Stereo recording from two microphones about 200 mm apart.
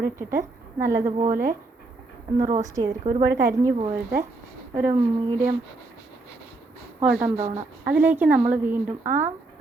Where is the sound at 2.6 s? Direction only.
15° right (ahead or behind).